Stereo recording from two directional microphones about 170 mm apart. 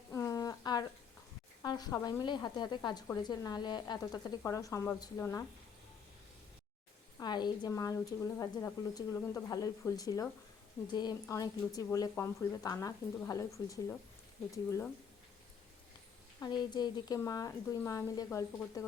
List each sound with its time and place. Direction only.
0.1 s a sound: 20° left (ahead or behind)
1.6 s speech: 25° left (ahead or behind)
7.2 s speech: 25° left (ahead or behind)
14.5 s speech: 15° left (ahead or behind)
16.4 s speech: 25° left (ahead or behind)